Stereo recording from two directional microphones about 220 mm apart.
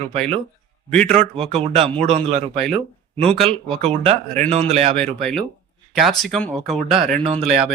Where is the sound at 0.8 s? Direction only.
5° left (ahead or behind).